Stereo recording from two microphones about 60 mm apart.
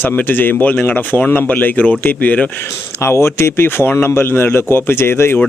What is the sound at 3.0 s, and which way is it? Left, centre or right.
Speech, left.